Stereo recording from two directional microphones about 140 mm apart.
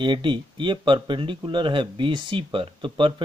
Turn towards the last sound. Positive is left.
turn(degrees=-35)  # may be behind; listen again after turning